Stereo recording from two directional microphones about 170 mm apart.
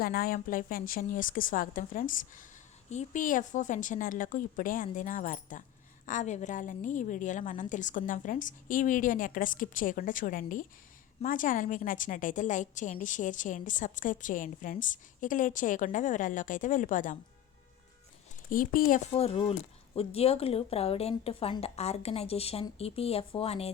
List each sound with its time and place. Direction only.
0.0 s a woman's voice: 60° left (ahead or behind)
18.5 s a woman's voice: 55° left (ahead or behind)
19.1 s a woman's voice: 35° left (ahead or behind)